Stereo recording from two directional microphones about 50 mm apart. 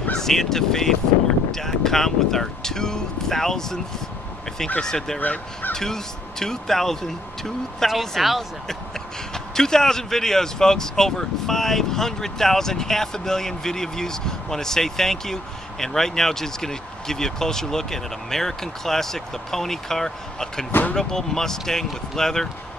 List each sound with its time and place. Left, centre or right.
0.1 s a man's voice: centre
5.2 s speech: left
5.7 s a man's voice: centre
8.6 s a man's voice: centre